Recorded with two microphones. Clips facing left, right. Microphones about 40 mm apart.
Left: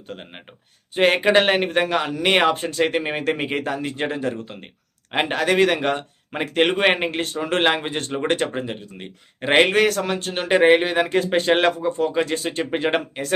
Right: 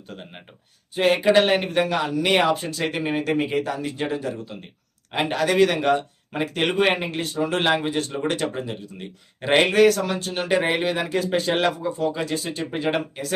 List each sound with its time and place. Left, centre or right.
0.1 s speech: left